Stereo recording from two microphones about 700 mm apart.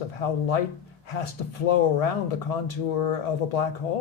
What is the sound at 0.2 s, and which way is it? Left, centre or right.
Speech, left.